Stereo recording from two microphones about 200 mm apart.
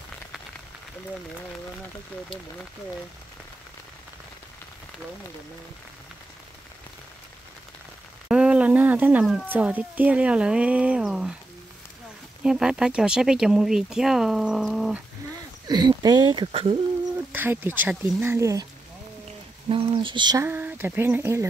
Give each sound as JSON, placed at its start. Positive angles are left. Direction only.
{"t": 8.3, "sound": "speech", "side_deg": -5}
{"t": 12.4, "sound": "speech", "side_deg": -5}
{"t": 15.6, "sound": "speech", "side_deg": -20}
{"t": 17.3, "sound": "speech", "side_deg": -10}
{"t": 19.7, "sound": "speech", "side_deg": -25}
{"t": 20.4, "sound": "speech", "side_deg": -10}